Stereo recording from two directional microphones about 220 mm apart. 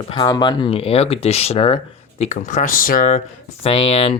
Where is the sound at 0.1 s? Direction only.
20° left (ahead or behind); by 3.2 s 40° left (ahead or behind).